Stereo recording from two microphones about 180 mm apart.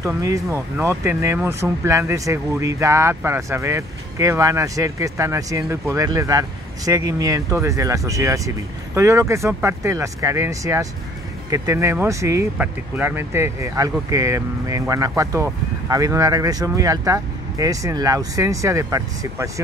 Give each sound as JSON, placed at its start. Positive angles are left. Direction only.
{"t": 0.0, "sound": "speech", "side_deg": -20}